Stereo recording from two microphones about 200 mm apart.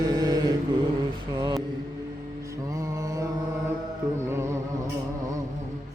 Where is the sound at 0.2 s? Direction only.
20° right (ahead or behind).